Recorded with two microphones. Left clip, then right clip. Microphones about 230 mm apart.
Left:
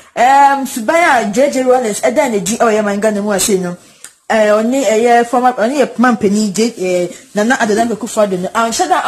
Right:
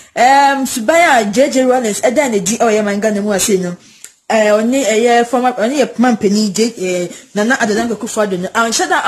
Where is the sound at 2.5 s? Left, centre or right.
Centre.